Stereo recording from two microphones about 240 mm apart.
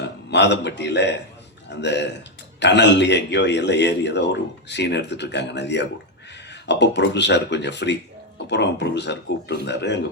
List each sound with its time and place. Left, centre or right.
0.3 s a man's voice: left